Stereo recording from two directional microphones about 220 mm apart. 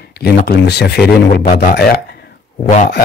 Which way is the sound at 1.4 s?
35° left (ahead or behind).